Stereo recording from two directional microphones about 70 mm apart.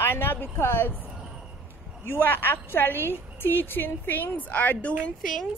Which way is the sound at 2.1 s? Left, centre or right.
Left.